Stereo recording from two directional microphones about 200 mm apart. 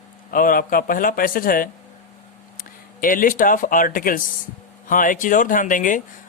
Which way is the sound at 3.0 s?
45° left (ahead or behind).